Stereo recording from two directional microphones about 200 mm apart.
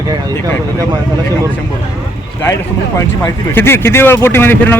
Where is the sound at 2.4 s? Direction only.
15° left (ahead or behind).